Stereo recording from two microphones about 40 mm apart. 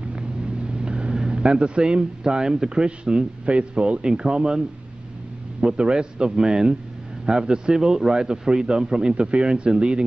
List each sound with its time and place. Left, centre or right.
0.7 s a man's voice: right